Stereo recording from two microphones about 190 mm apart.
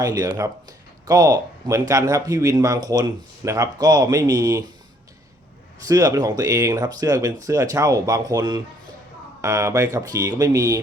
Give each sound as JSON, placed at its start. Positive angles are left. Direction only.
{"t": 0.0, "sound": "speech", "side_deg": -20}
{"t": 5.9, "sound": "speech", "side_deg": -20}